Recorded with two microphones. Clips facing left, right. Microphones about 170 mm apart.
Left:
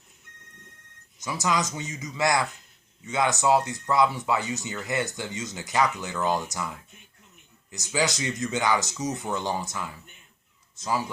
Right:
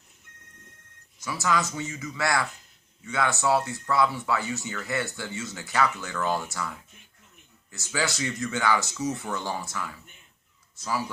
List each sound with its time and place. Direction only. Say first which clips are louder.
1.2 s speech: even; 20° left (ahead or behind)